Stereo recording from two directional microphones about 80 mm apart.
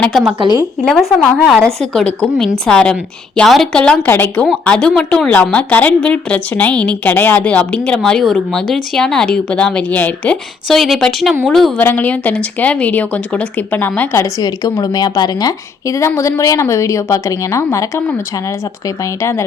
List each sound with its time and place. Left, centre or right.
0.1 s a woman's voice: centre
4.0 s a woman's voice: left
4.6 s a woman's voice: centre
10.7 s speech: centre
11.8 s a woman's voice: left
14.2 s a woman's voice: left
16.0 s a woman's voice: left
19.2 s a woman's voice: left